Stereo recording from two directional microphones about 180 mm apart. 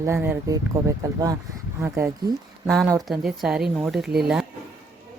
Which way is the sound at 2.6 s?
Centre (ahead or behind).